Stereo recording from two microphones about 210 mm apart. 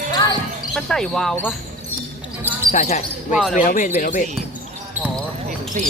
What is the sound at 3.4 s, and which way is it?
Speech, 5° right (ahead or behind).